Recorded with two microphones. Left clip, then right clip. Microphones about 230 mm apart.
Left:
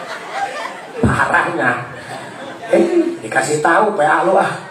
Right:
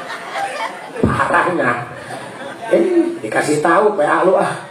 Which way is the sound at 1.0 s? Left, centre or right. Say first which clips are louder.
Even; left.